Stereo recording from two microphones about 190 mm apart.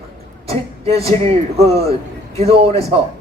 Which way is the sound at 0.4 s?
30° right (ahead or behind).